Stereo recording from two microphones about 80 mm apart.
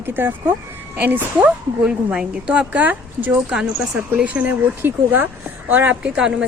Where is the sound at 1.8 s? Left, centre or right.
Centre.